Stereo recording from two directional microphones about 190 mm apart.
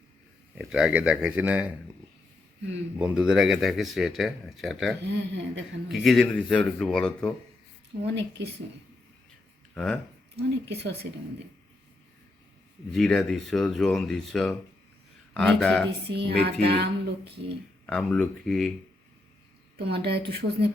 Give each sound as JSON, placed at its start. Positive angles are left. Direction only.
{"t": 0.5, "sound": "speech", "side_deg": -5}
{"t": 3.0, "sound": "speech", "side_deg": -5}
{"t": 5.0, "sound": "speech", "side_deg": -70}
{"t": 5.9, "sound": "speech", "side_deg": 0}
{"t": 8.0, "sound": "speech", "side_deg": -65}
{"t": 9.7, "sound": "speech", "side_deg": 5}
{"t": 10.3, "sound": "speech", "side_deg": -60}
{"t": 12.9, "sound": "speech", "side_deg": 0}
{"t": 15.9, "sound": "speech", "side_deg": -60}
{"t": 17.8, "sound": "speech", "side_deg": 5}
{"t": 19.8, "sound": "speech", "side_deg": -60}